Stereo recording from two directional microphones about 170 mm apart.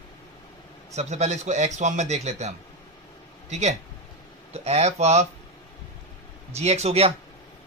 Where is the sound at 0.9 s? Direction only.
40° right (ahead or behind).